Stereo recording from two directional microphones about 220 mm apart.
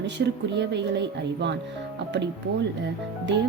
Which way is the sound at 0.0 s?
50° right (ahead or behind).